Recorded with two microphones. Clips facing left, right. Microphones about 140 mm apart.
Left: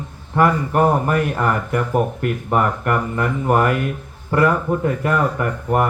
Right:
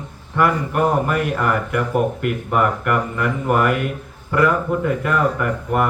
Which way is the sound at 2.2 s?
40° left (ahead or behind).